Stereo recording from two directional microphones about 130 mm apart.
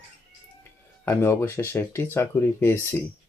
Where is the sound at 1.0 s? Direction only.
20° left (ahead or behind).